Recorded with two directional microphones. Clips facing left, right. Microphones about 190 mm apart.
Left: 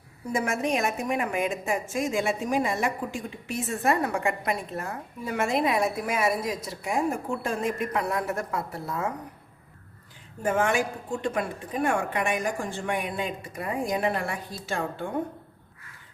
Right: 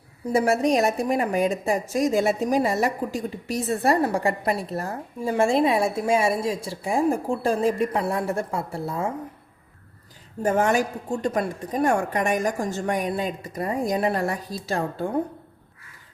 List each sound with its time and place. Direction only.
0.3 s a woman's voice: 35° right (ahead or behind)
10.4 s a woman's voice: 40° right (ahead or behind)